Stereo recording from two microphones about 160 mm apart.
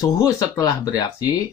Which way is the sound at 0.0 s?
25° left (ahead or behind).